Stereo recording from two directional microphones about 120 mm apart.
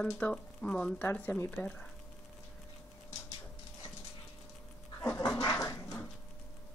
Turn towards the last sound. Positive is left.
turn(degrees=25)  # may be behind; listen again after turning